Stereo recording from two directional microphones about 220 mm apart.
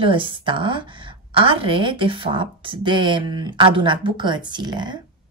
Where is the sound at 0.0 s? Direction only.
25° right (ahead or behind).